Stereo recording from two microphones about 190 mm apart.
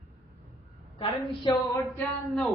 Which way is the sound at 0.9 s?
25° left (ahead or behind).